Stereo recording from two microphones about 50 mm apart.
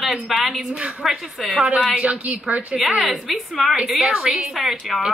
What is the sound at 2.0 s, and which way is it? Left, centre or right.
Speech, right.